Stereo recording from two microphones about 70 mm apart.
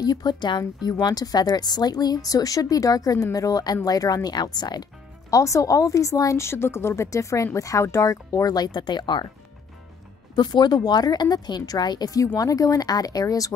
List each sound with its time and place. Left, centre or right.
0.0 s speech: left
1.0 s speech: left
5.3 s speech: left
10.3 s speech: left
12.4 s speech: left